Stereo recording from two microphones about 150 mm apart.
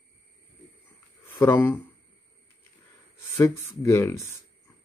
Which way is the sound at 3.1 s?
15° left (ahead or behind).